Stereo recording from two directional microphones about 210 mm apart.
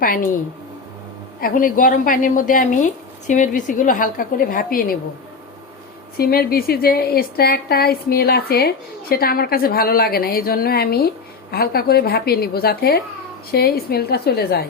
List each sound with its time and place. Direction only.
1.4 s a woman's voice: 40° left (ahead or behind)
6.1 s a woman's voice: 45° left (ahead or behind)